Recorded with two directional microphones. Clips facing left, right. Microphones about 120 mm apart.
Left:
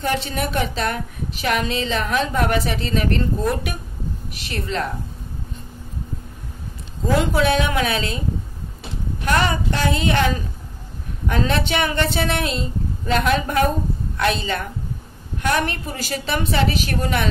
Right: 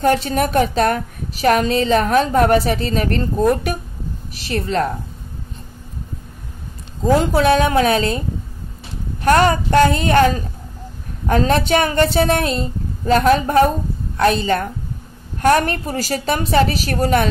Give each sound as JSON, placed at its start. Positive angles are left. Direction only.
{"t": 0.0, "sound": "a woman's voice", "side_deg": -45}
{"t": 7.2, "sound": "a woman's voice", "side_deg": -40}
{"t": 9.2, "sound": "a woman's voice", "side_deg": -45}